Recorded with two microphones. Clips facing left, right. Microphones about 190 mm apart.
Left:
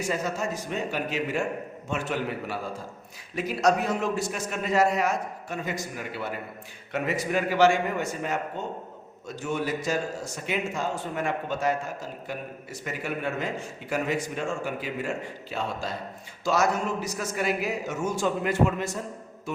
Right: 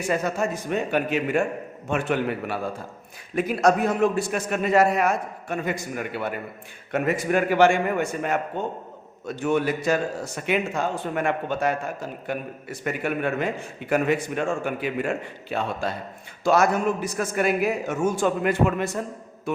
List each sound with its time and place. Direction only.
0.1 s a man's voice: 55° right (ahead or behind)